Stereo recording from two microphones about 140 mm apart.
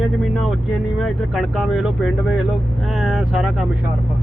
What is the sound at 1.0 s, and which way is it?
Speech, centre (ahead or behind).